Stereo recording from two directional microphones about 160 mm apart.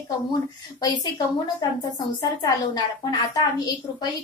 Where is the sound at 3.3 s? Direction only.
25° left (ahead or behind).